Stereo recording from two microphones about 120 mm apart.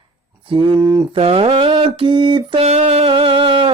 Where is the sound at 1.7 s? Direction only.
45° right (ahead or behind).